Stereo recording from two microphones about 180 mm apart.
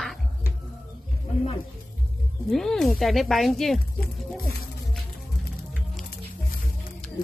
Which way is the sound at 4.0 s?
60° left (ahead or behind).